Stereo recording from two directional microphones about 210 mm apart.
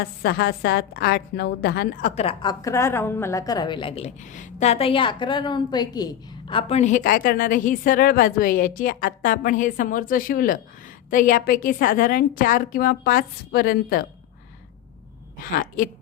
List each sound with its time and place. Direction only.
0.0 s a woman's voice: 50° left (ahead or behind)
15.5 s a woman's voice: 45° left (ahead or behind)